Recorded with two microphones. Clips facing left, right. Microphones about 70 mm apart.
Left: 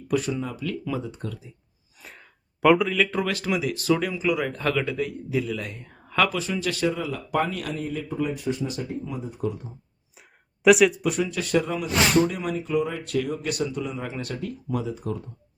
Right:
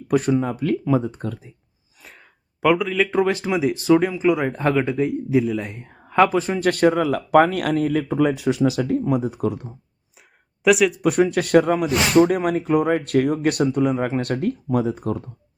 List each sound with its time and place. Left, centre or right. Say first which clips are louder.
0.1 s speech: right 7 dB; right
2.0 s a sound: even; centre
3.0 s speech: right 5 dB; right
8.1 s speech: right 8 dB; right
10.6 s speech: even; centre
11.0 s speech: right 8 dB; right